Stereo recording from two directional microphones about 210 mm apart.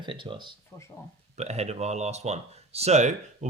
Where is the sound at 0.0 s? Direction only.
25° right (ahead or behind).